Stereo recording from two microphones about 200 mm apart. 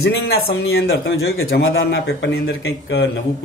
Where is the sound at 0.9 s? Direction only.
80° left.